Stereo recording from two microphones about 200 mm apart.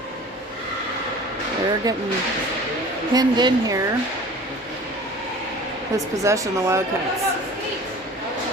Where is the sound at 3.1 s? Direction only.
20° right (ahead or behind).